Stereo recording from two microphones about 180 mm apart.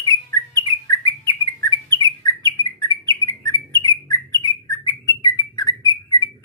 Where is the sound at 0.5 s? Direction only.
20° left (ahead or behind).